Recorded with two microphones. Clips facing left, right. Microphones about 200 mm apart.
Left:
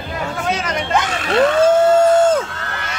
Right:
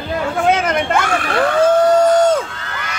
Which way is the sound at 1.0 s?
20° left (ahead or behind).